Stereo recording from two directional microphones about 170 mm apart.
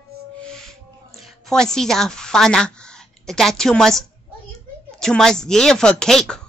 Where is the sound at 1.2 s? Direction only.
5° left (ahead or behind).